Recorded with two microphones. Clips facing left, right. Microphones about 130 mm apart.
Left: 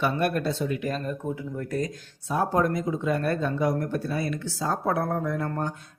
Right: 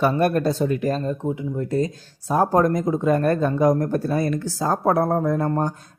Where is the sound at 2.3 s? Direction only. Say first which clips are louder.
Right 6 dB; 40° right (ahead or behind).